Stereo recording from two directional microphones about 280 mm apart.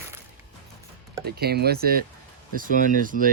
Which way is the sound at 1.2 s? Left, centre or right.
Right.